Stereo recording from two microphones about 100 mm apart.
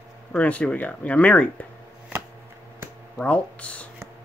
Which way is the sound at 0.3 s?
15° left (ahead or behind).